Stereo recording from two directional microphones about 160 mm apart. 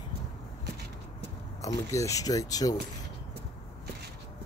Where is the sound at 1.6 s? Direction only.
20° left (ahead or behind).